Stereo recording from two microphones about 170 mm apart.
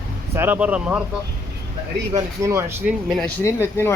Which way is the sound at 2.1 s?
15° right (ahead or behind).